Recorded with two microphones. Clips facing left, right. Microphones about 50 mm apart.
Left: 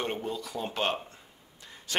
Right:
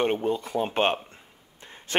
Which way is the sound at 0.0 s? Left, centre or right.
Right.